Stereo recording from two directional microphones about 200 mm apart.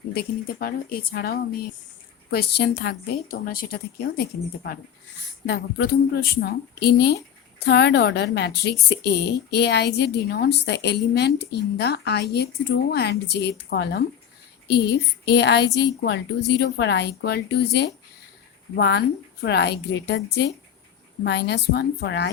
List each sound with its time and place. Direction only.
0.1 s a woman's voice: 50° left (ahead or behind)